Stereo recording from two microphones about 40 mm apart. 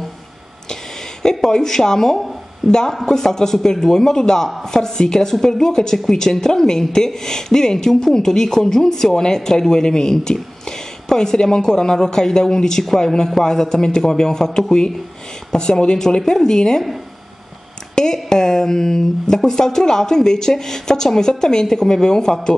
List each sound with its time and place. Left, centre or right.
1.2 s speech: centre
2.1 s a sound: centre
2.9 s speech: centre
17.9 s speech: centre